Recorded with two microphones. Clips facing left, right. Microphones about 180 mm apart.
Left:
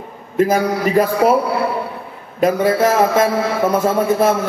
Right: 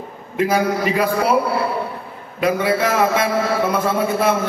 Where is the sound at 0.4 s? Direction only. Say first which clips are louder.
Left 3 dB; 45° left (ahead or behind).